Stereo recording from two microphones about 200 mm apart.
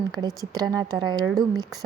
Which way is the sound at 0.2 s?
20° right (ahead or behind).